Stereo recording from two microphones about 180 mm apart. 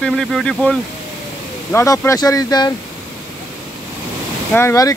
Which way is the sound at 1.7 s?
15° left (ahead or behind).